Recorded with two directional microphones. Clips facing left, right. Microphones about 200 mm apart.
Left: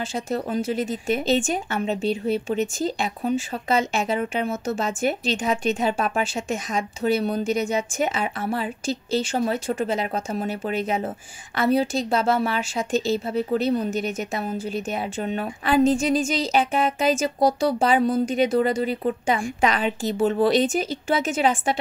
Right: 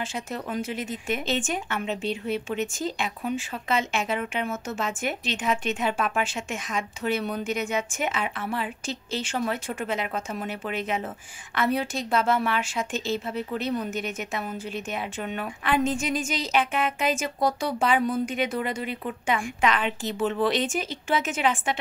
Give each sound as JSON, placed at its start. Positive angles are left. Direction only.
{"t": 0.0, "sound": "speech", "side_deg": 35}